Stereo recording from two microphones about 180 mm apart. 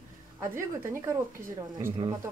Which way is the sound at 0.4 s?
15° right (ahead or behind).